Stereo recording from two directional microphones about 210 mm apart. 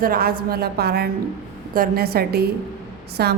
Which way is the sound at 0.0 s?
45° right (ahead or behind).